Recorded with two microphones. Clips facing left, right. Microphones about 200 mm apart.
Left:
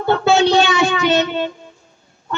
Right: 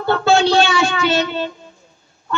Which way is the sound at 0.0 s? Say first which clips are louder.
Left 1 dB; 20° left (ahead or behind).